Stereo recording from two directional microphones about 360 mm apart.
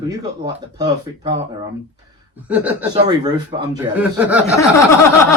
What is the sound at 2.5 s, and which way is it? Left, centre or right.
Speech, centre.